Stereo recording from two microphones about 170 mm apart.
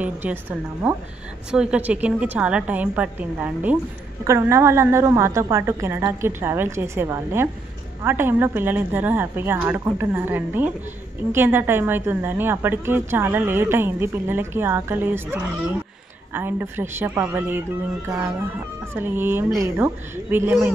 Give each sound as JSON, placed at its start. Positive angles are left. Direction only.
{"t": 0.0, "sound": "a woman's voice", "side_deg": -10}